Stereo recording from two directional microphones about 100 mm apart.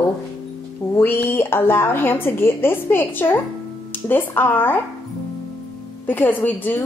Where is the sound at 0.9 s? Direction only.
20° left (ahead or behind).